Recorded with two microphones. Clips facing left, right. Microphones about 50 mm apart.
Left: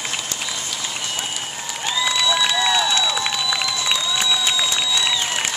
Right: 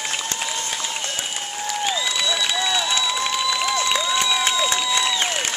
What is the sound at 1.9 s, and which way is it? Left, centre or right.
Crowd, centre.